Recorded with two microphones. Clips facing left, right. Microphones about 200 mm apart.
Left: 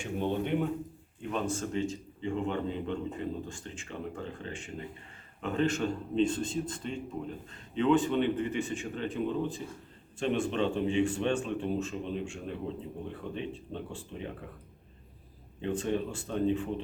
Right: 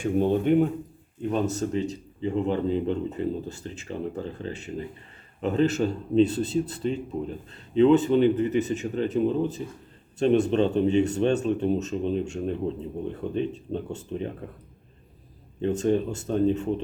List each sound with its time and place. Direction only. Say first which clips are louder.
0.0 s speech: right 9 dB; 45° right (ahead or behind)
15.6 s speech: right 7 dB; 40° right (ahead or behind)